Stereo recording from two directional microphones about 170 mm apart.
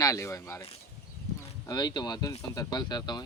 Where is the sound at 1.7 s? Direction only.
25° left (ahead or behind).